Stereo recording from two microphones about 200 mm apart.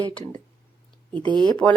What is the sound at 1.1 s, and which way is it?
Speech, 25° right (ahead or behind).